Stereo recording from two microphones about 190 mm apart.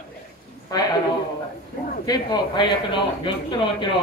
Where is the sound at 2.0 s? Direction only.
20° left (ahead or behind).